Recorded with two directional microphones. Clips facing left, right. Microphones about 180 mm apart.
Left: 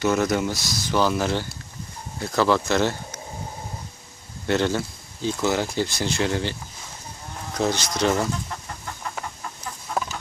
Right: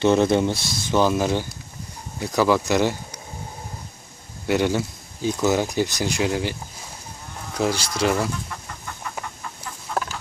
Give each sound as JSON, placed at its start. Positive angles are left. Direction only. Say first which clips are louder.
{"t": 0.0, "sound": "speech", "louder": "right 4 dB", "side_deg": -25}
{"t": 4.4, "sound": "speech", "louder": "right 1 dB", "side_deg": -10}